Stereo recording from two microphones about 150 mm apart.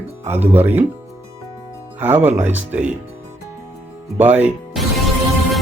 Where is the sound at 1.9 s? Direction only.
15° right (ahead or behind).